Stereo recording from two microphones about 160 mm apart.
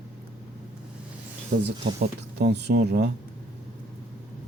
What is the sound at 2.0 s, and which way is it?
Speech, 90° right.